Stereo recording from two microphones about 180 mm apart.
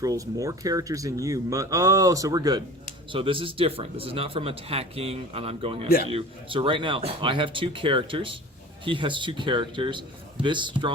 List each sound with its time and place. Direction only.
0.0 s speech: 20° right (ahead or behind)